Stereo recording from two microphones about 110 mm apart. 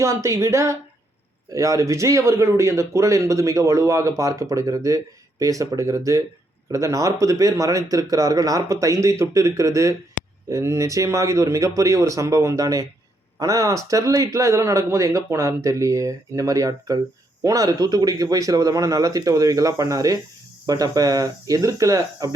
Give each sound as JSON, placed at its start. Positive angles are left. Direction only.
{"t": 0.0, "sound": "speech", "side_deg": -25}